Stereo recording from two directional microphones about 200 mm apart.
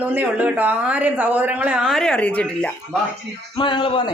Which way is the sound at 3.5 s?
25° left (ahead or behind).